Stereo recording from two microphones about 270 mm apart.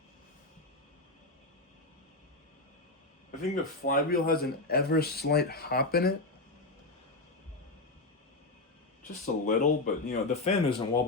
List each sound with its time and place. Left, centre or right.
3.5 s speech: left
9.2 s speech: left